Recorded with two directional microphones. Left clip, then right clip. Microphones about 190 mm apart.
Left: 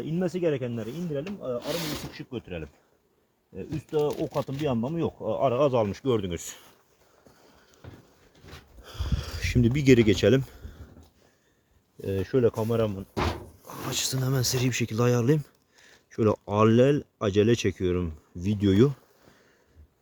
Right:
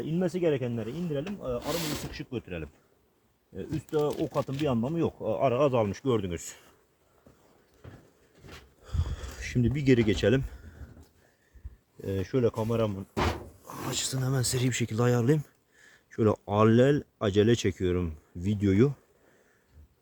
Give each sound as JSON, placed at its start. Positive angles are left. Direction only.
{"t": 0.2, "sound": "speech", "side_deg": 5}
{"t": 3.8, "sound": "speech", "side_deg": 15}
{"t": 8.8, "sound": "a sound", "side_deg": 40}
{"t": 12.0, "sound": "speech", "side_deg": 25}
{"t": 13.1, "sound": "a sound", "side_deg": 0}
{"t": 13.7, "sound": "speech", "side_deg": 25}
{"t": 14.5, "sound": "speech", "side_deg": 10}